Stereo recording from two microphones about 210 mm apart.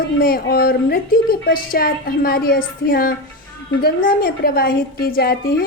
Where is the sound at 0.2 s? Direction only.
45° left (ahead or behind).